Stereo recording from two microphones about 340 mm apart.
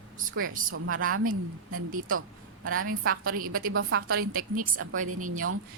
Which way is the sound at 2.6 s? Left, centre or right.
Right.